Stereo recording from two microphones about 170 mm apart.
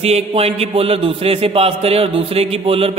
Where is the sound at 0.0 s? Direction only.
35° right (ahead or behind).